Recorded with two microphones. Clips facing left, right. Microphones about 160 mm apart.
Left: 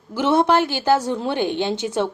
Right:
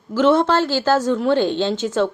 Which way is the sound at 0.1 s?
15° left (ahead or behind).